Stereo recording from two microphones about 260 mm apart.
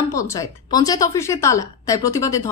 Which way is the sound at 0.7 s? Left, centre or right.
Centre.